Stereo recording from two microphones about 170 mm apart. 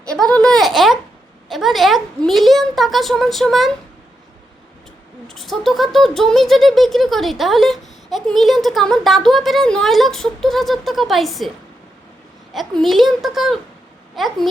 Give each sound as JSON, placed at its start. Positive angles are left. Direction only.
{"t": 0.1, "sound": "a sound", "side_deg": 5}
{"t": 1.5, "sound": "speech", "side_deg": 0}
{"t": 5.3, "sound": "speech", "side_deg": 0}
{"t": 12.5, "sound": "speech", "side_deg": 0}